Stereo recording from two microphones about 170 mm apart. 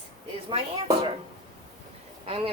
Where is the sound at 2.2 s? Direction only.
35° right (ahead or behind).